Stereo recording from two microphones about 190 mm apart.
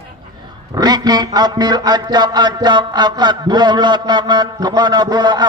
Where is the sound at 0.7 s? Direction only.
20° right (ahead or behind).